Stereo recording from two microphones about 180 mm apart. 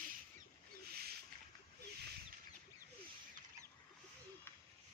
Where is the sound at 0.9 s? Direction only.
60° right (ahead or behind).